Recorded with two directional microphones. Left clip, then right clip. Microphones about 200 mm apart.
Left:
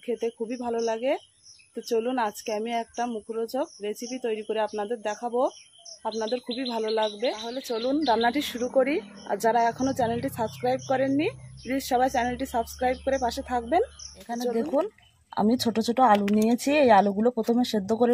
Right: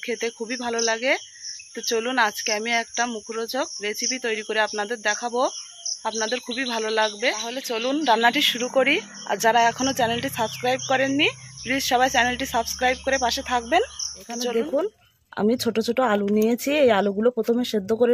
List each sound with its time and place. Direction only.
0.0 s speech: centre (ahead or behind)
15.3 s speech: 20° right (ahead or behind)